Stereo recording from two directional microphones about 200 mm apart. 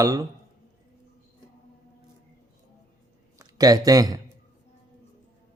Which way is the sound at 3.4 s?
20° right (ahead or behind).